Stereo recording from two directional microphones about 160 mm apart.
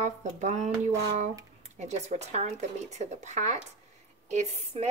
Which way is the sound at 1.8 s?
45° right (ahead or behind).